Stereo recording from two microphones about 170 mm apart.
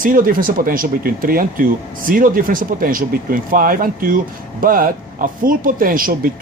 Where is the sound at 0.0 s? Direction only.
55° right (ahead or behind).